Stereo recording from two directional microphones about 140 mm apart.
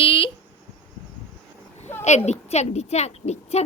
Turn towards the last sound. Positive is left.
turn(degrees=50)  # may be behind; listen again after turning